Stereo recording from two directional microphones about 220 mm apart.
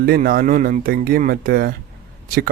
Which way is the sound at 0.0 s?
40° right (ahead or behind).